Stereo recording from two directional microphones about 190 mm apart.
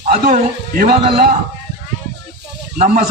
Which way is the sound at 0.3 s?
50° right (ahead or behind).